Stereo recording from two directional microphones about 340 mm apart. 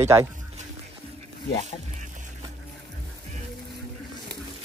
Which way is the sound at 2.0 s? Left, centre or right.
Right.